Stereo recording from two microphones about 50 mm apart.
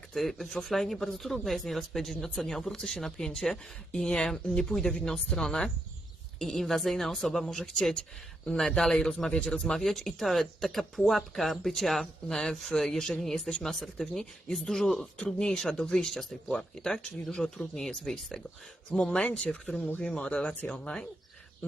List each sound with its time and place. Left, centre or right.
0.1 s speech: centre
19.1 s speech: left